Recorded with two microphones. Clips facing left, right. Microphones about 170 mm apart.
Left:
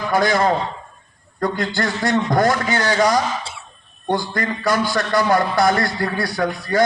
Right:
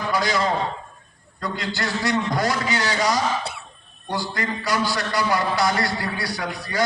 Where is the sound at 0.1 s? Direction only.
50° left (ahead or behind).